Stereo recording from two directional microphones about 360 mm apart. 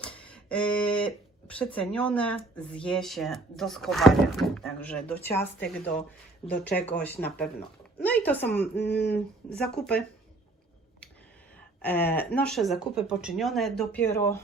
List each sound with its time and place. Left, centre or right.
0.0 s speech: centre
6.7 s speech: centre
8.7 s a sound: left
9.5 s speech: centre
11.8 s speech: centre